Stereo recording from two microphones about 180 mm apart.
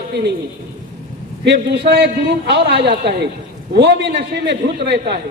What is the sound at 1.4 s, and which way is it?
A man's voice, 70° right (ahead or behind).